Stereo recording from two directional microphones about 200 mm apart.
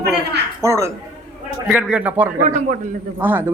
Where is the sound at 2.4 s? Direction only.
40° right (ahead or behind).